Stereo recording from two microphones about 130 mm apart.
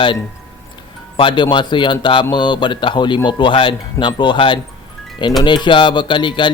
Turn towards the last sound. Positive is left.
turn(degrees=35)  # may be behind; listen again after turning